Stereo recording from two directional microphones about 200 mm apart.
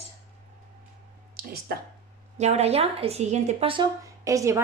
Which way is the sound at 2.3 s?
35° right (ahead or behind).